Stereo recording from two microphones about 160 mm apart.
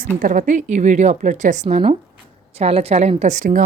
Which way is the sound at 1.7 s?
40° right (ahead or behind).